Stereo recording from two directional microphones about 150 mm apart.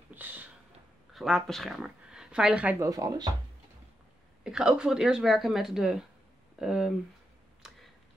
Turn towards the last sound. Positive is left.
turn(degrees=-5)  # may be behind; listen again after turning